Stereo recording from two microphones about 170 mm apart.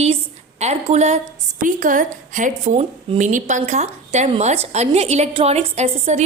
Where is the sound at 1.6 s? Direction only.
50° right (ahead or behind).